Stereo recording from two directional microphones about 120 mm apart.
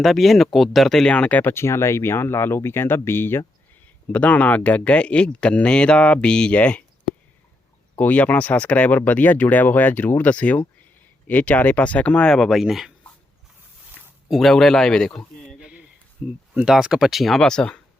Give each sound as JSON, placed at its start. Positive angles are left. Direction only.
{"t": 0.0, "sound": "speech", "side_deg": 0}
{"t": 7.9, "sound": "speech", "side_deg": 15}
{"t": 14.3, "sound": "speech", "side_deg": 0}
{"t": 16.2, "sound": "speech", "side_deg": -10}